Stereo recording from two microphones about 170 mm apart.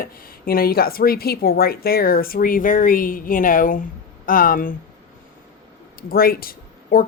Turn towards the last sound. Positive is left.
turn(degrees=60)  # may be behind; listen again after turning